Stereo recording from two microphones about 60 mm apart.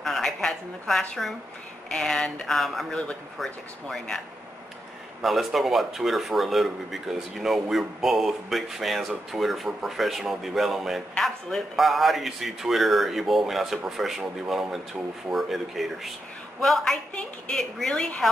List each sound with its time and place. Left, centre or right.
0.0 s a sound: centre
1.9 s speech: centre
5.2 s speech: centre
17.1 s speech: centre
17.6 s speech: centre